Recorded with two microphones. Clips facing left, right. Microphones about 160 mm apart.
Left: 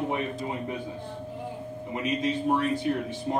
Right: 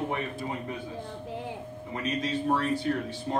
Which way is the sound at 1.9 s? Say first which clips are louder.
Left 3 dB; 20° left (ahead or behind).